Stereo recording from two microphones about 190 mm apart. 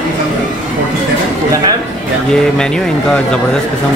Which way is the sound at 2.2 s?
5° left (ahead or behind).